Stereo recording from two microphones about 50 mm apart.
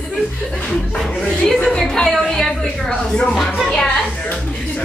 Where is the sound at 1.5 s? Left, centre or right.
Centre.